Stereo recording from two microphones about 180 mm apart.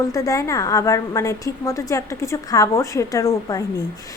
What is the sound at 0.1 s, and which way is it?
A woman's voice, 20° left (ahead or behind).